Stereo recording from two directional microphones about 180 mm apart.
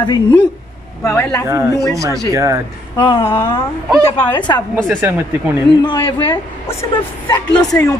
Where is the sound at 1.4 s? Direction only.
15° right (ahead or behind).